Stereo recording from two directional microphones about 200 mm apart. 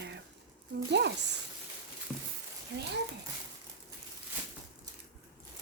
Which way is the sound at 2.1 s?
5° right (ahead or behind).